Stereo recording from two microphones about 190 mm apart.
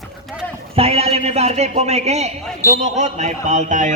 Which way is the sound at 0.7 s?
30° right (ahead or behind).